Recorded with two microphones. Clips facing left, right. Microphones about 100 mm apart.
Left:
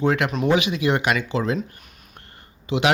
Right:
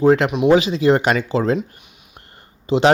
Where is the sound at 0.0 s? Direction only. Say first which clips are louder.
Right 7 dB; 30° right (ahead or behind).